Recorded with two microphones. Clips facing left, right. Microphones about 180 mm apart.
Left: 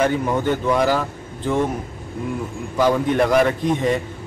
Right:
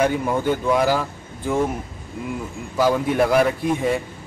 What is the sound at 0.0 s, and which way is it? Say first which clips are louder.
Speech: left 1 dB; 10° right (ahead or behind).